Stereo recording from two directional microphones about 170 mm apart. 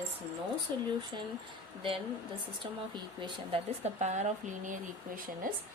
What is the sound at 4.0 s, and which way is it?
Speech, 45° right (ahead or behind).